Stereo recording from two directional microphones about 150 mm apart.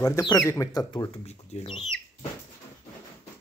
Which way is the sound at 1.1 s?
45° left (ahead or behind).